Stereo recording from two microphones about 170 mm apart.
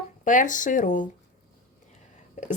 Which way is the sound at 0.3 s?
50° left (ahead or behind).